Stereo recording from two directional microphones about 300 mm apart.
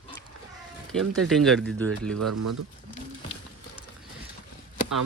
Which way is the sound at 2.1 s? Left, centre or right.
Right.